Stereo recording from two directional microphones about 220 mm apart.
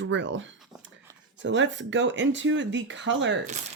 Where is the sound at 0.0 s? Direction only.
55° right (ahead or behind).